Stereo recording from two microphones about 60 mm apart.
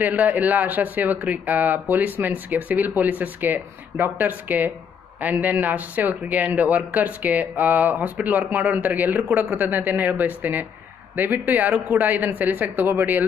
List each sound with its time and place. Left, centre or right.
0.1 s speech: right